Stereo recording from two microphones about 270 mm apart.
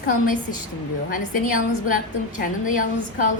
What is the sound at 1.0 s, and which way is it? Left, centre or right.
A woman's voice, left.